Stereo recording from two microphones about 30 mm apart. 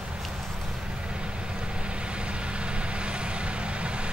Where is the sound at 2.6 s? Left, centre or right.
Right.